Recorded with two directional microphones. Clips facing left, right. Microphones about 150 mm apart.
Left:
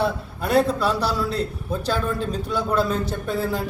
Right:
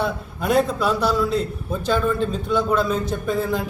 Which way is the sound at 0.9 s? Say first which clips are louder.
Right 3 dB; 35° left (ahead or behind).